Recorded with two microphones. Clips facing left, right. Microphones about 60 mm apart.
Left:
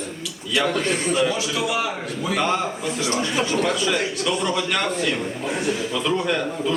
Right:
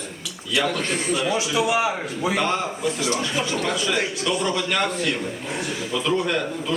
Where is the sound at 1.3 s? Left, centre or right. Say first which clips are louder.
Right 2 dB; centre.